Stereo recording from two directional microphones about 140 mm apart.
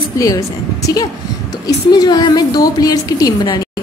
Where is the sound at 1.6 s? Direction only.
30° left (ahead or behind).